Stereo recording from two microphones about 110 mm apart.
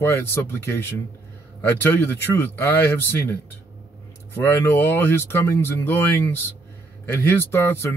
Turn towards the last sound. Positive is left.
turn(degrees=20)  # may be behind; listen again after turning